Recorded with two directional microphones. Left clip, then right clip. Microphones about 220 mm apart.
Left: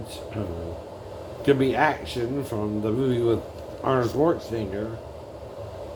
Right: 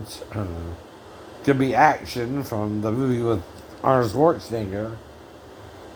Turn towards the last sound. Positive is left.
turn(degrees=-45)  # may be behind; listen again after turning